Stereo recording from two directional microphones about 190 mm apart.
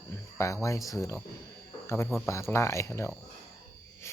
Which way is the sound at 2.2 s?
15° left (ahead or behind).